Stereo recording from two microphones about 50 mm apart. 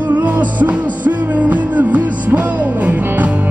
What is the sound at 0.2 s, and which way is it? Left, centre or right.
Music, right.